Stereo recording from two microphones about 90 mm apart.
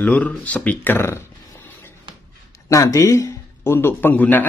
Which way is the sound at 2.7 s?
35° left (ahead or behind).